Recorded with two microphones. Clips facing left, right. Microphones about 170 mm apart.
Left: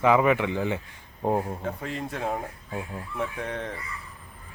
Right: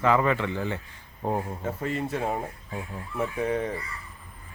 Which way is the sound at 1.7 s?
5° right (ahead or behind).